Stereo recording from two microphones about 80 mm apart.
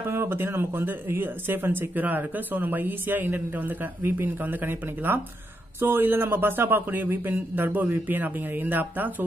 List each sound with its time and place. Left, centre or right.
0.0 s speech: right